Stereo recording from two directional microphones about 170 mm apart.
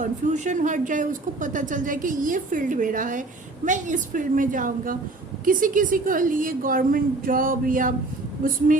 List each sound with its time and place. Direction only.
0.0 s a woman's voice: 45° right (ahead or behind)